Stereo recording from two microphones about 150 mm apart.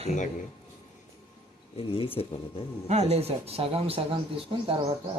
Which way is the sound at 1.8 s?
40° left (ahead or behind).